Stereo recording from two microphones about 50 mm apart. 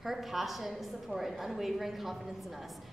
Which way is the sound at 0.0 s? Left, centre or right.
Centre.